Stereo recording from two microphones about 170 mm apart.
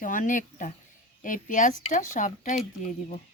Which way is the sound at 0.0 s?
50° left (ahead or behind).